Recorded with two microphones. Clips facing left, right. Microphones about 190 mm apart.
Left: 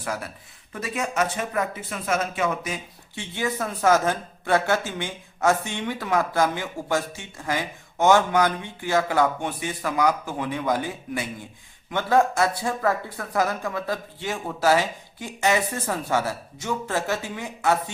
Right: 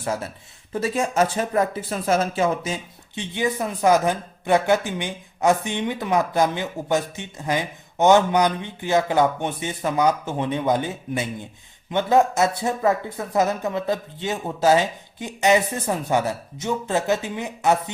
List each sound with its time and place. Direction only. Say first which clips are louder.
0.0 s speech: right 4 dB; 25° right (ahead or behind)